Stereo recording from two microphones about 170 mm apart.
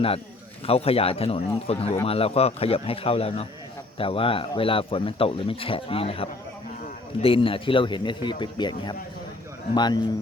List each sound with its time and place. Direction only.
0.7 s speech: 35° left (ahead or behind)